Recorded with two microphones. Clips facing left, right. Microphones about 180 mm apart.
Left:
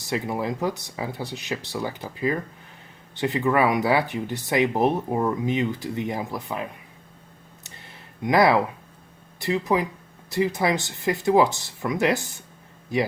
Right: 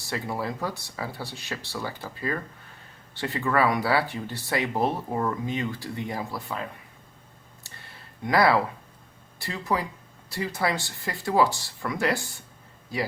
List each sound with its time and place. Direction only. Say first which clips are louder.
0.0 s speech: left 4 dB; 20° left (ahead or behind)
7.6 s a sound: left 1 dB; 20° left (ahead or behind)
9.4 s speech: left 6 dB; 20° left (ahead or behind)